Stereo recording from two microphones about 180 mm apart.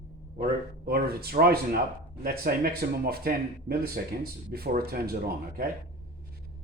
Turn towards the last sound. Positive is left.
turn(degrees=-55)  # may be behind; listen again after turning